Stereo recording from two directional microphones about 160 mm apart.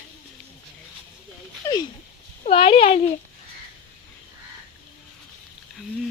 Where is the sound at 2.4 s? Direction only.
35° left (ahead or behind).